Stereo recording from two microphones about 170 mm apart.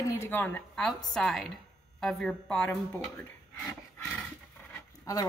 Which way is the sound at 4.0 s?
5° left (ahead or behind).